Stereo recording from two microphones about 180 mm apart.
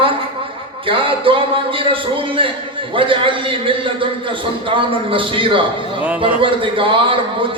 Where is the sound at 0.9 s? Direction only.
30° right (ahead or behind).